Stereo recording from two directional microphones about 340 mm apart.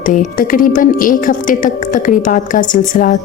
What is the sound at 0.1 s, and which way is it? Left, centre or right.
Speech, left.